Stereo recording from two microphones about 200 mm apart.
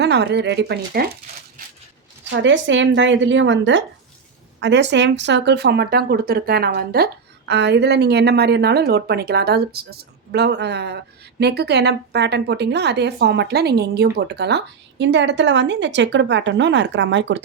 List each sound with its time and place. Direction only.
0.0 s speech: 60° right (ahead or behind)
2.3 s a woman's voice: 65° right (ahead or behind)